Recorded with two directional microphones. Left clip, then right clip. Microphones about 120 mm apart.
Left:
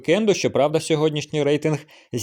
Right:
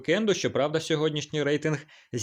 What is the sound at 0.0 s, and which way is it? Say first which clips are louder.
Speech: left 6 dB; 40° left (ahead or behind).